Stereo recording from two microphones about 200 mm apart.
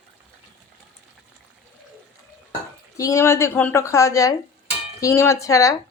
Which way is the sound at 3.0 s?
15° left (ahead or behind).